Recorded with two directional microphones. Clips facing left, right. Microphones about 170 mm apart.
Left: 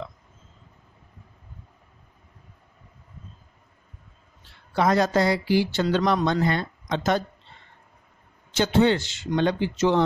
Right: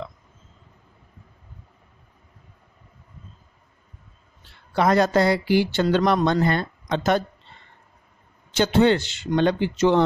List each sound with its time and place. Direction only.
4.7 s speech: 60° right (ahead or behind)
8.5 s speech: 60° right (ahead or behind)